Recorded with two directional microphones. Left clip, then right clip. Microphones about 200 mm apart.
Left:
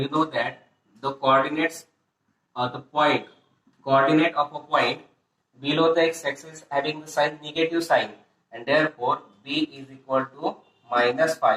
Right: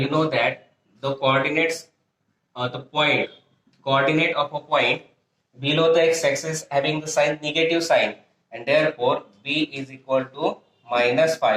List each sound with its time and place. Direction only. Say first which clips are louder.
0.0 s speech: right 4 dB; 25° right (ahead or behind)